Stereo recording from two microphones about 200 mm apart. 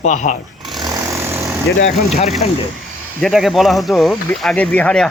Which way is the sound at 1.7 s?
60° left (ahead or behind).